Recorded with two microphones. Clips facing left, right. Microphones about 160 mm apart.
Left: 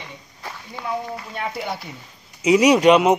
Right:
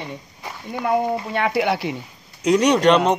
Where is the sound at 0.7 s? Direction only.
60° right (ahead or behind).